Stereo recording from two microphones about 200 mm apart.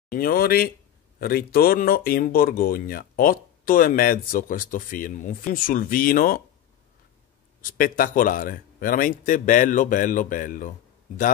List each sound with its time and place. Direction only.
0.1 s speech: 45° left (ahead or behind)
7.6 s speech: 45° left (ahead or behind)